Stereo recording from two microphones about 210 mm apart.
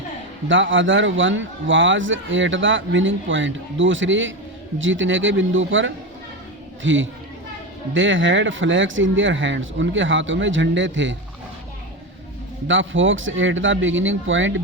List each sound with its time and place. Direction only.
0.4 s a man's voice: 65° right (ahead or behind)
12.6 s a man's voice: 65° right (ahead or behind)